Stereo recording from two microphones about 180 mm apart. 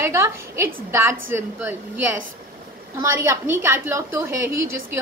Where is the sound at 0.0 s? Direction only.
15° right (ahead or behind).